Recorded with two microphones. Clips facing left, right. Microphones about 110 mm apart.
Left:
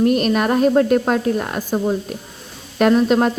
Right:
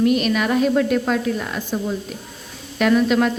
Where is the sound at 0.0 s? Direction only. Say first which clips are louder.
Left 2 dB; 40° left (ahead or behind).